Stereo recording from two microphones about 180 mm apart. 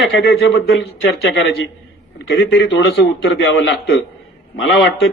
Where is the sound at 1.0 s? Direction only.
90° left.